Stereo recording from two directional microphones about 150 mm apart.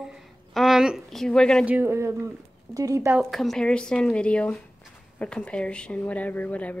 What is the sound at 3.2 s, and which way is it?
A woman's voice, centre (ahead or behind).